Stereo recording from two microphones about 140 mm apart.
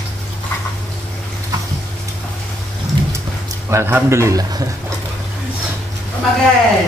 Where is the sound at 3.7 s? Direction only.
15° right (ahead or behind).